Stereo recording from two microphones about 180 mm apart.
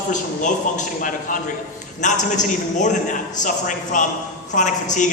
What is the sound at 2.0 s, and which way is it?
A woman's voice, 40° left (ahead or behind).